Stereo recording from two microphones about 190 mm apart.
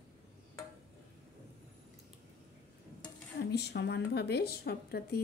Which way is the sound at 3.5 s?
60° left (ahead or behind).